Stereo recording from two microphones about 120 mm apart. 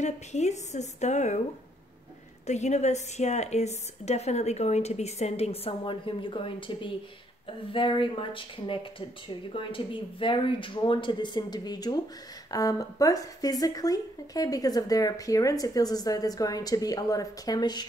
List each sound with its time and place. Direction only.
0.0 s a woman's voice: 70° left (ahead or behind)
2.4 s a woman's voice: 70° left (ahead or behind); by 17.8 s 35° left (ahead or behind)